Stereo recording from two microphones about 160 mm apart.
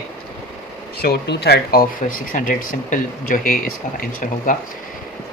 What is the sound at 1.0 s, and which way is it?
Speech, 90° left.